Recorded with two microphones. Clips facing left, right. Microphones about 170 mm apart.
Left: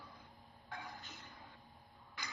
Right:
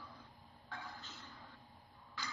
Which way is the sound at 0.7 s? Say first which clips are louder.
Left 1 dB; 15° left (ahead or behind).